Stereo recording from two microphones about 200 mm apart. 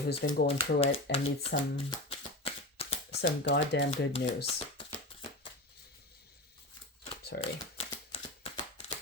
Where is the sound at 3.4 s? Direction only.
60° left (ahead or behind).